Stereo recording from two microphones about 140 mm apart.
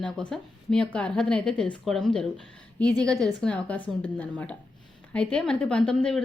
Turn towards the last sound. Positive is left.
turn(degrees=5)  # may be behind; listen again after turning